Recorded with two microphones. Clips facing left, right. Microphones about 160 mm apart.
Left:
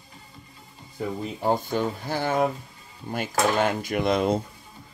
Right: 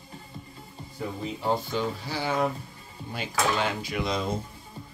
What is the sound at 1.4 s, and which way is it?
Speech, 50° left (ahead or behind).